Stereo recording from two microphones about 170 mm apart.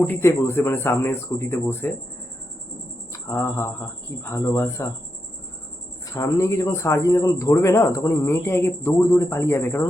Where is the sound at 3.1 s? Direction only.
15° left (ahead or behind).